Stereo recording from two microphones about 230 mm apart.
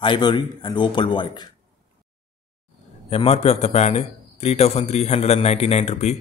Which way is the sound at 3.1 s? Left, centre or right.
Left.